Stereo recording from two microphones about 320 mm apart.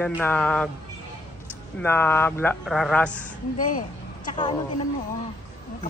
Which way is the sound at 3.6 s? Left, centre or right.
Left.